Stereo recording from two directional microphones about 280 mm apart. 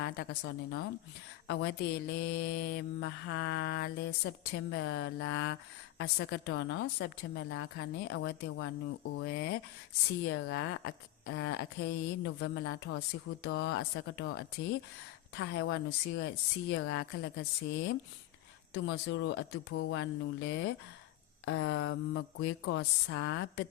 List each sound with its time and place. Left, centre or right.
0.0 s mantra: left
15.4 s mantra: left